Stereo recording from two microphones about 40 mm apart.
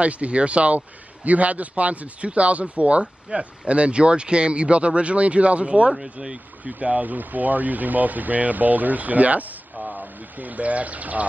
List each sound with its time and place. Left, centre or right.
0.0 s a man's voice: right